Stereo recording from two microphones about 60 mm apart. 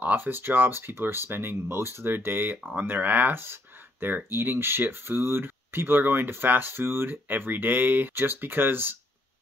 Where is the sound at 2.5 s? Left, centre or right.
Right.